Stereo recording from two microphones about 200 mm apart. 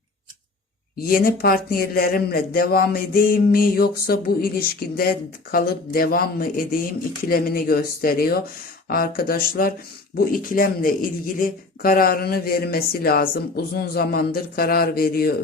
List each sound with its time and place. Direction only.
0.9 s speech: 45° left (ahead or behind)